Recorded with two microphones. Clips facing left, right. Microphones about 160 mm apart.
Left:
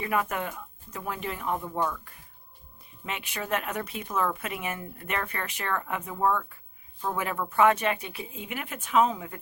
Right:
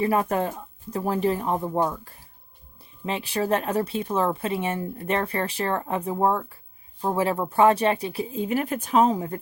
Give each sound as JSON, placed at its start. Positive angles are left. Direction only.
{"t": 0.0, "sound": "speech", "side_deg": -35}